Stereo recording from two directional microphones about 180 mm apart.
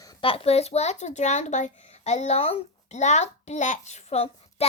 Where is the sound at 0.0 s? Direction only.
25° left (ahead or behind).